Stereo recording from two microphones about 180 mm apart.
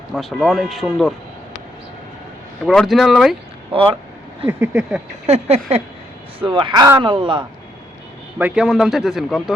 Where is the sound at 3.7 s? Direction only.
30° right (ahead or behind).